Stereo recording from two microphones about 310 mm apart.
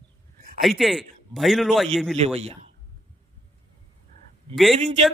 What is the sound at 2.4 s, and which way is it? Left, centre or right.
Speech, centre.